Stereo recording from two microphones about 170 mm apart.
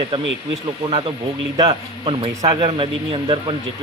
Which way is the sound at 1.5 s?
20° right (ahead or behind).